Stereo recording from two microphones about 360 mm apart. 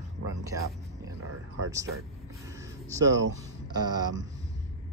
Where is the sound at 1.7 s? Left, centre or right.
Centre.